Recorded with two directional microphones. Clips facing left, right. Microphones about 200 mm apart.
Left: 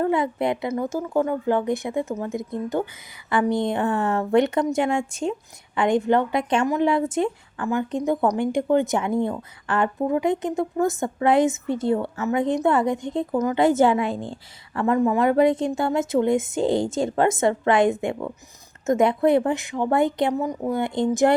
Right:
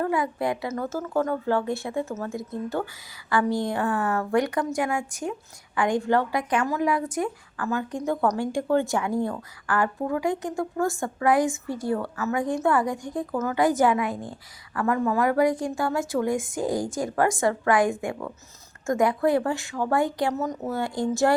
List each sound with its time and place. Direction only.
0.0 s a woman's voice: 25° left (ahead or behind)